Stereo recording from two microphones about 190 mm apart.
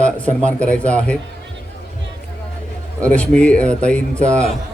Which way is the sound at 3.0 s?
5° left (ahead or behind).